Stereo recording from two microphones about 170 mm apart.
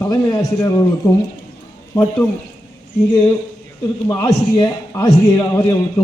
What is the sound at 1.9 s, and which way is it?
Speech, 15° left (ahead or behind).